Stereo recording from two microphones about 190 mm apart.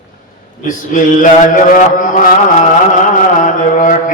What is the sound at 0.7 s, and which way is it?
Mantra, 45° left (ahead or behind).